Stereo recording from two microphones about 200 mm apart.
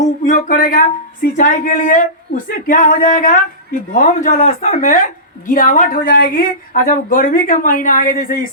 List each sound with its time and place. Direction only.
0.3 s a woman's voice: 40° left (ahead or behind)